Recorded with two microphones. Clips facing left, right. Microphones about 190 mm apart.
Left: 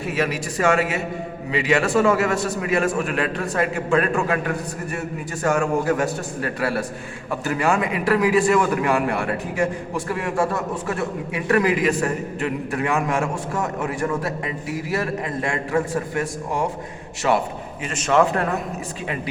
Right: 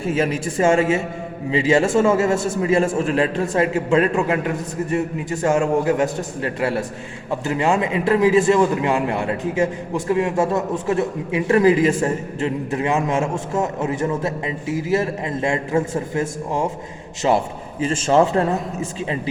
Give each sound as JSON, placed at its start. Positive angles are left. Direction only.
{"t": 0.0, "sound": "a man's voice", "side_deg": -25}